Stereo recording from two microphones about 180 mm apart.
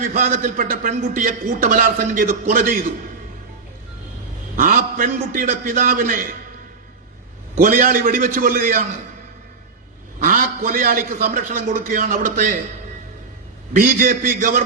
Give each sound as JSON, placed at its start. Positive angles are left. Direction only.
{"t": 0.0, "sound": "a man's voice", "side_deg": -45}
{"t": 4.5, "sound": "a man's voice", "side_deg": -50}
{"t": 7.5, "sound": "a man's voice", "side_deg": -50}
{"t": 10.2, "sound": "a man's voice", "side_deg": -50}
{"t": 13.7, "sound": "a man's voice", "side_deg": -50}